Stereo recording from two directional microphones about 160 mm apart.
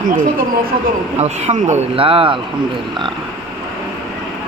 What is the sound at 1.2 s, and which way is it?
Speech, 45° right (ahead or behind).